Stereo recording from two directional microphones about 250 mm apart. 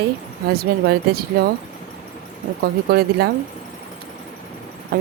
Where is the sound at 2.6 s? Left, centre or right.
Right.